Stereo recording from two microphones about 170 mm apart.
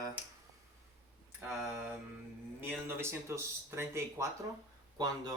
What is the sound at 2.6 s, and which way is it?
Speech, 15° right (ahead or behind).